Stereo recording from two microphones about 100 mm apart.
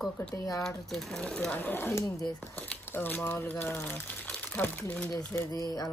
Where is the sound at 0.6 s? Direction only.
5° left (ahead or behind).